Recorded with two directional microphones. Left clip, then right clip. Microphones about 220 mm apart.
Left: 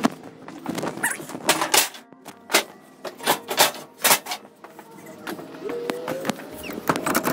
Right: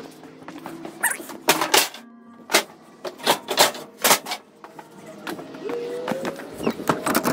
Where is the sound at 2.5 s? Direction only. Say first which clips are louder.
Right 1 dB; centre (ahead or behind).